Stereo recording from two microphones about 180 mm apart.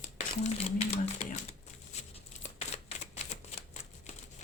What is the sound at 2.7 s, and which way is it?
Typewriter, 40° left (ahead or behind).